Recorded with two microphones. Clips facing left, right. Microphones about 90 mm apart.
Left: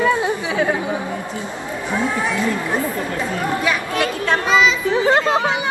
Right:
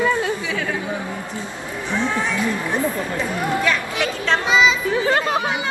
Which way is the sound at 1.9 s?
10° left (ahead or behind).